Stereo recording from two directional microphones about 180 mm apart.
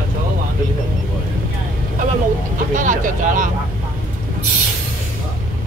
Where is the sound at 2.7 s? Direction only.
45° right (ahead or behind).